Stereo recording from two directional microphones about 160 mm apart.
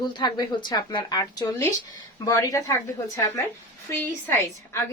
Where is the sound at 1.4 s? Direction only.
15° left (ahead or behind).